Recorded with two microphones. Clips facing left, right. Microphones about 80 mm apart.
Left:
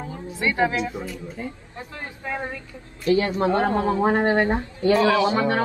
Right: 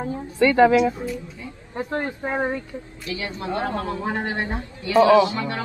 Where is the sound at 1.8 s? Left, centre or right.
Right.